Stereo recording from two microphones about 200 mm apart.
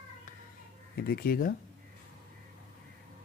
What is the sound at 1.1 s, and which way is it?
Speech, 50° left (ahead or behind).